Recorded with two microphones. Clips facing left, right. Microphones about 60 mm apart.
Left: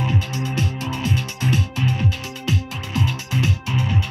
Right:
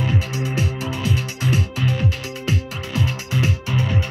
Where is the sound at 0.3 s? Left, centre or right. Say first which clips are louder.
Right 1 dB; centre.